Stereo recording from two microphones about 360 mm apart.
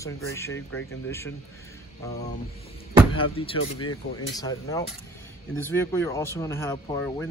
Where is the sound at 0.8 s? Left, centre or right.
Left.